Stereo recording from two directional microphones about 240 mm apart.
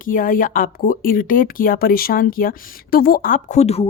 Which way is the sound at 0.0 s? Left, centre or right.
Left.